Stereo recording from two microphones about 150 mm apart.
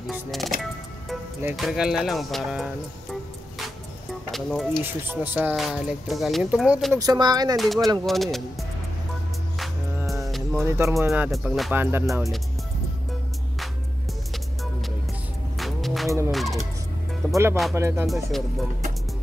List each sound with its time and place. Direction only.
0.0 s speech: centre (ahead or behind)
1.6 s speech: 5° right (ahead or behind)
4.3 s speech: centre (ahead or behind)
4.8 s speech: 15° right (ahead or behind)
7.0 s speech: 25° right (ahead or behind)
7.5 s speech: centre (ahead or behind)
10.5 s speech: 20° right (ahead or behind)
11.1 s speech: centre (ahead or behind)
11.7 s speech: 15° right (ahead or behind)
14.3 s music: centre (ahead or behind)
17.2 s music: 10° left (ahead or behind)
17.7 s speech: 20° right (ahead or behind)
18.0 s speech: centre (ahead or behind)